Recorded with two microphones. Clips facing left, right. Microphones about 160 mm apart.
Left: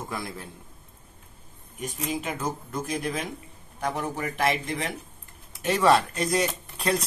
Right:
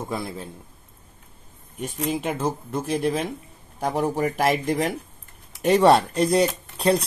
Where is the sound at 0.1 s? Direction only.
20° right (ahead or behind).